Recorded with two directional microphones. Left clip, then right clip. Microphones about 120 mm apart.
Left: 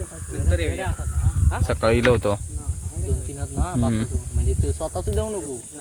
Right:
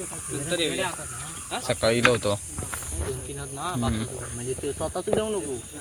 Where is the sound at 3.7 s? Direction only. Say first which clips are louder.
Left 8 dB; 65° left (ahead or behind).